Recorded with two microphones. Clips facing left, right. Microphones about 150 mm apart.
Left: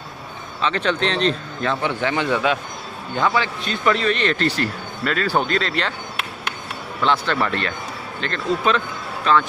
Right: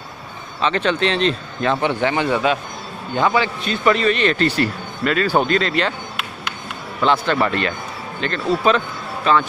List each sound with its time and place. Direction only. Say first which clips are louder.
0.6 s a man's voice: right 2 dB; 5° right (ahead or behind)
2.0 s a man's voice: right 2 dB; 20° right (ahead or behind)
7.0 s speech: right 3 dB; 10° right (ahead or behind)